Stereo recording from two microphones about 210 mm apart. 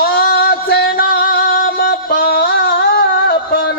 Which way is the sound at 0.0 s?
50° left (ahead or behind).